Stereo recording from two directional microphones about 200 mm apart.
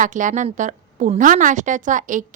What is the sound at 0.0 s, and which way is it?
A woman's voice, 40° right (ahead or behind).